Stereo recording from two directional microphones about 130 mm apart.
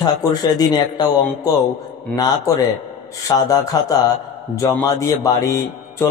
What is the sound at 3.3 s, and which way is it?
A man's voice, 30° left (ahead or behind).